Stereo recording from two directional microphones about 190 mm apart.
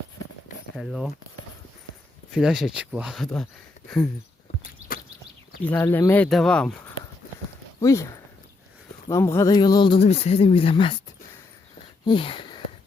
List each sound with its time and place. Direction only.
0.8 s speech: centre (ahead or behind)
2.3 s speech: 5° right (ahead or behind)
5.6 s speech: 10° left (ahead or behind)
7.8 s speech: 15° left (ahead or behind)
12.0 s a sound: 25° left (ahead or behind)